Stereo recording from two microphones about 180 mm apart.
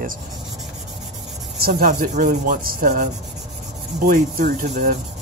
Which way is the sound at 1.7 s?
55° right (ahead or behind).